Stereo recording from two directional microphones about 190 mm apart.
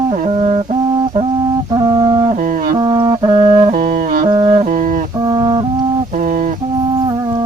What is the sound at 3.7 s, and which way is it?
Music, 45° right (ahead or behind).